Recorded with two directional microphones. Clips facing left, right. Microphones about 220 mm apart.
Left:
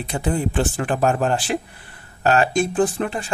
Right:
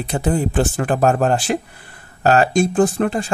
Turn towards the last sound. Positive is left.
turn(degrees=-40)  # may be behind; listen again after turning